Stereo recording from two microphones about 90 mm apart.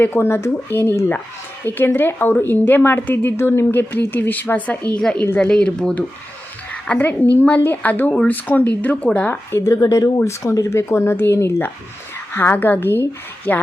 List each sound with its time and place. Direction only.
0.0 s a woman's voice: 25° left (ahead or behind)
9.5 s a woman's voice: 35° left (ahead or behind)